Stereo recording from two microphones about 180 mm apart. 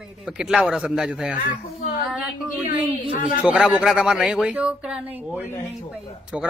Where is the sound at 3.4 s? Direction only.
Centre (ahead or behind).